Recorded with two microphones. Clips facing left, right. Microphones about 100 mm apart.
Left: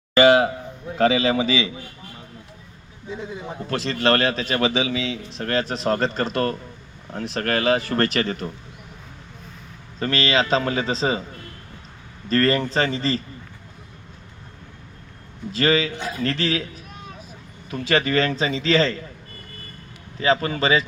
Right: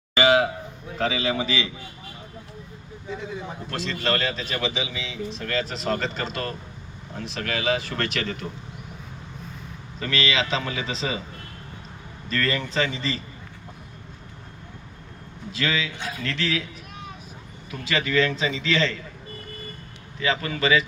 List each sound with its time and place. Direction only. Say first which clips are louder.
0.2 s a sound: left 4 dB; 45° left (ahead or behind)
0.9 s a man's voice: left 7 dB; 55° left (ahead or behind)
3.7 s a man's voice: left 6 dB; 60° left (ahead or behind); by 8.4 s 40° left (ahead or behind)
10.0 s a man's voice: left 4 dB; 40° left (ahead or behind)
12.3 s a man's voice: left 7 dB; 40° left (ahead or behind)
15.5 s a man's voice: left 7 dB; 40° left (ahead or behind)
17.7 s a man's voice: left 5 dB; 40° left (ahead or behind)
20.1 s a man's voice: left 5 dB; 35° left (ahead or behind)